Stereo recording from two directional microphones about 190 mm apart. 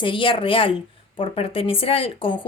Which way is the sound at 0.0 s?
25° left (ahead or behind).